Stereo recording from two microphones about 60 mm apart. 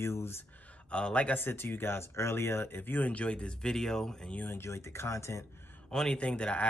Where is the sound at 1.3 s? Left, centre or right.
Left; by 4.3 s centre.